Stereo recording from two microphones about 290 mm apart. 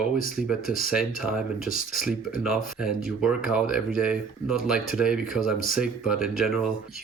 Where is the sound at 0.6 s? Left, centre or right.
Left.